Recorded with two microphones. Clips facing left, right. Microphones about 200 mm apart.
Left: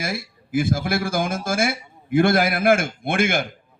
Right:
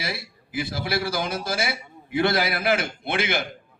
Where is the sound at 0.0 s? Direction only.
50° left (ahead or behind).